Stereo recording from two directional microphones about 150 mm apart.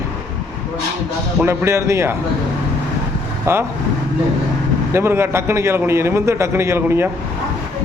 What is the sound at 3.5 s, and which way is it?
Speech, 15° right (ahead or behind).